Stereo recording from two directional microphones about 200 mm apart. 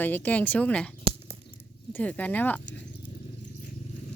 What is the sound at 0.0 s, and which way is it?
Speech, 10° left (ahead or behind).